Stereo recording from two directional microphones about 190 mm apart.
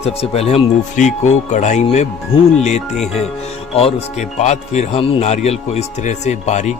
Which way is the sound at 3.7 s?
35° left (ahead or behind).